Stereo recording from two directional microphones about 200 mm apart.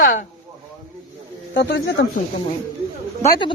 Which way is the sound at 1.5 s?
55° left (ahead or behind).